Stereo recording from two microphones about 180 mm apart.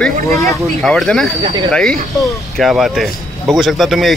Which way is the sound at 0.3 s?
15° left (ahead or behind).